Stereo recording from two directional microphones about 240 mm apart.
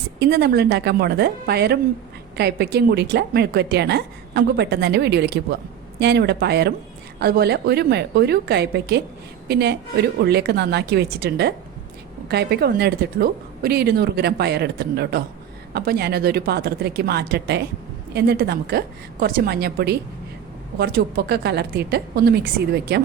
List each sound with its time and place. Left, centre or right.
0.2 s a woman's voice: right